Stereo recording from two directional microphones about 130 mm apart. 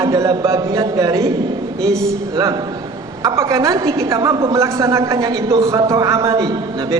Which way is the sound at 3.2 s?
25° right (ahead or behind).